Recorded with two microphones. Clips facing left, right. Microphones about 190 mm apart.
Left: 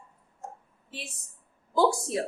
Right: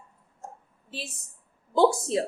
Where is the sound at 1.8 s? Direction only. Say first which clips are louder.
Right 3 dB; 25° right (ahead or behind).